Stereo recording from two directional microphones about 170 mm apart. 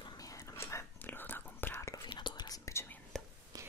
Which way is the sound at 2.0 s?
25° left (ahead or behind).